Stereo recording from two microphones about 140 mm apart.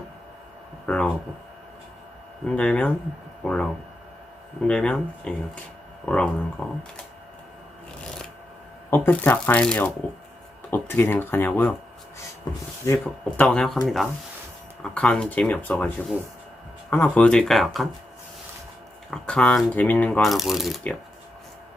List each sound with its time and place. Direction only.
0.9 s a sound: 5° left (ahead or behind)
2.6 s speech: 10° left (ahead or behind)
8.9 s speech: 15° left (ahead or behind)
12.8 s speech: 20° left (ahead or behind)
13.4 s speech: 5° left (ahead or behind)
16.9 s speech: 10° left (ahead or behind)
19.1 s speech: 5° left (ahead or behind)
20.2 s speech: centre (ahead or behind)